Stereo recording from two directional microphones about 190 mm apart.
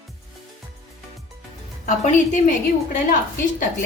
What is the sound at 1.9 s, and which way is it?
A woman's voice, 40° left (ahead or behind).